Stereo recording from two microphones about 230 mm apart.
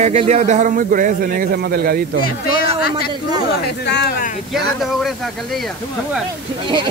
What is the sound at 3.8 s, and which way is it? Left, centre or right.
Speech, left.